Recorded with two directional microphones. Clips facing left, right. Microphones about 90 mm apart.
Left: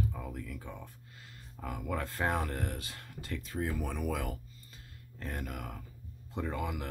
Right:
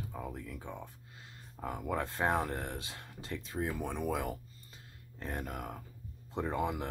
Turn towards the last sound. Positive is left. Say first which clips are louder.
# right 2 dB
turn(degrees=-25)  # may be behind; listen again after turning